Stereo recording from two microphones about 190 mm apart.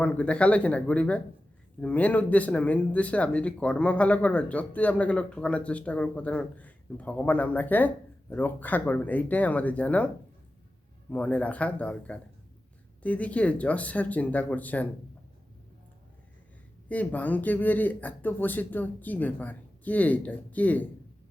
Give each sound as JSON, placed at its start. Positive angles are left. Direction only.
{"t": 0.0, "sound": "speech", "side_deg": 5}
{"t": 11.1, "sound": "speech", "side_deg": 5}
{"t": 16.9, "sound": "speech", "side_deg": 10}